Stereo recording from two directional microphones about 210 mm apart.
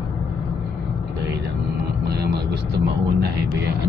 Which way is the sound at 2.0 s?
50° right (ahead or behind).